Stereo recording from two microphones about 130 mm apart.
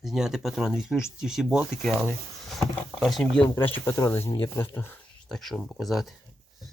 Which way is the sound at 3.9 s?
20° left (ahead or behind).